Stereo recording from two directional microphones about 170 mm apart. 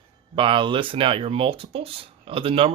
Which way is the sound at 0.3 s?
30° right (ahead or behind).